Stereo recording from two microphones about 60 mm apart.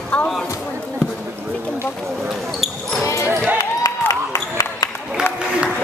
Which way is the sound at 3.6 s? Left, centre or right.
Left.